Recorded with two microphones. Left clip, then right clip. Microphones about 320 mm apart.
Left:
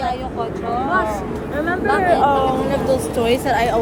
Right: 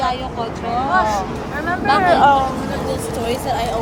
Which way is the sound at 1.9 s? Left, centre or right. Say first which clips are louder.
Right 3 dB; right.